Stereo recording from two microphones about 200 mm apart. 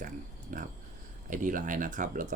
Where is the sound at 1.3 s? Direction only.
40° right (ahead or behind).